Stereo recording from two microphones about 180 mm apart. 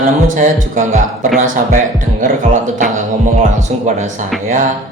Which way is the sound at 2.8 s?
45° right (ahead or behind).